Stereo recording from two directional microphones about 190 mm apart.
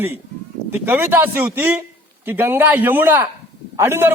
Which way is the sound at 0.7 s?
10° right (ahead or behind).